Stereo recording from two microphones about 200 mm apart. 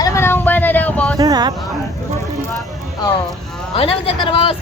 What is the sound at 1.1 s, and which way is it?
Speech, 20° right (ahead or behind).